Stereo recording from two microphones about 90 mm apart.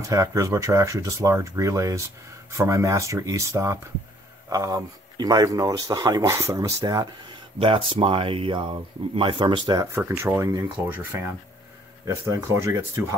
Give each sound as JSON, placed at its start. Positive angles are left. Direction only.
{"t": 0.1, "sound": "speech", "side_deg": -35}
{"t": 6.3, "sound": "speech", "side_deg": -30}
{"t": 6.8, "sound": "speech", "side_deg": -45}
{"t": 7.5, "sound": "speech", "side_deg": -85}
{"t": 9.9, "sound": "speech", "side_deg": -30}